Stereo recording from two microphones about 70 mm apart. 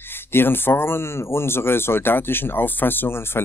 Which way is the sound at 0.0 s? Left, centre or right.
Left.